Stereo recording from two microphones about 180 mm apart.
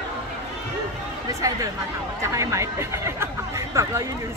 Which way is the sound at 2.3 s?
15° right (ahead or behind).